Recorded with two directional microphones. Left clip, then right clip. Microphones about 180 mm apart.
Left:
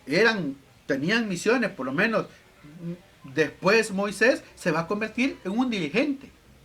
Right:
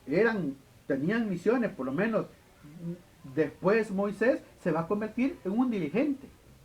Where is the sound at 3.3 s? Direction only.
20° left (ahead or behind).